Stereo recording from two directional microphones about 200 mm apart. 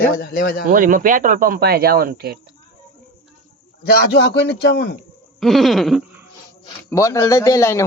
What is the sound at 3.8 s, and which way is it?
A man's voice, 50° left (ahead or behind).